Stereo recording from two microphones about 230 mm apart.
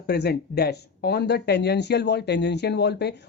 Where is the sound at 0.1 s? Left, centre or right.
Left.